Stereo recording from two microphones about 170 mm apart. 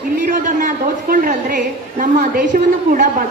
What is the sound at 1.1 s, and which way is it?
A woman's voice, 55° right (ahead or behind).